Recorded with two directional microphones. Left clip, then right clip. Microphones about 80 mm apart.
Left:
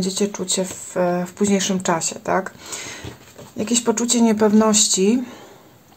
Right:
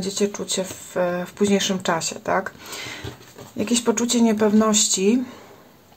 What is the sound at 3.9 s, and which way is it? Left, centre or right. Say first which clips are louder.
Speech: left 2 dB; centre.